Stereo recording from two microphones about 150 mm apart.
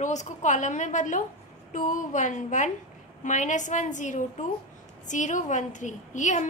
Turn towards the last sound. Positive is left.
turn(degrees=55)  # may be behind; listen again after turning